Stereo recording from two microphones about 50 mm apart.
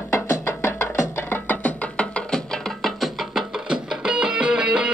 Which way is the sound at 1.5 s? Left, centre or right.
Left.